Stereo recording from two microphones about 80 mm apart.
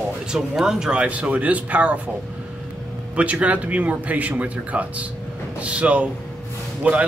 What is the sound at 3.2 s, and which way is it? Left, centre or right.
A man's voice, centre.